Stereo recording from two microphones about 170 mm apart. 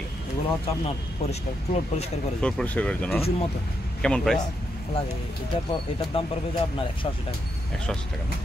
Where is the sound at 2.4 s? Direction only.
5° left (ahead or behind).